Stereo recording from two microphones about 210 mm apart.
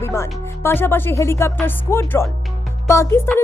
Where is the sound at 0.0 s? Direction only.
10° left (ahead or behind).